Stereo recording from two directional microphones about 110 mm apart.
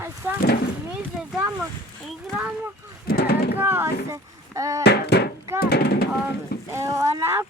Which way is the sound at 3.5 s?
20° right (ahead or behind).